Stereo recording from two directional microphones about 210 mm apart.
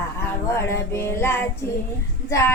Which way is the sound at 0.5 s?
10° left (ahead or behind).